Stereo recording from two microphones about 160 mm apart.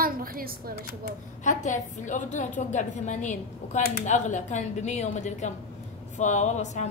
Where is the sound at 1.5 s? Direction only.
50° left (ahead or behind).